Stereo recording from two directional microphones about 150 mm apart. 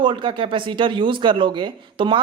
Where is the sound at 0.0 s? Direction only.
35° right (ahead or behind).